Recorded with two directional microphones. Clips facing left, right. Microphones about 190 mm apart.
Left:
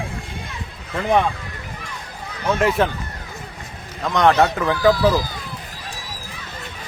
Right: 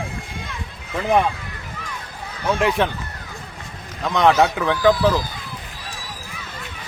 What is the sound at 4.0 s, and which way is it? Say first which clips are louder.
Speech: even; centre (ahead or behind).